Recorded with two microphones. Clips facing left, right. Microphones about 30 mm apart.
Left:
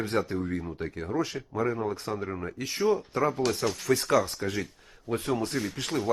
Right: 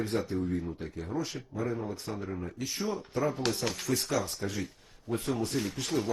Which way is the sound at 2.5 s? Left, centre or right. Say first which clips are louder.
Left 10 dB; left.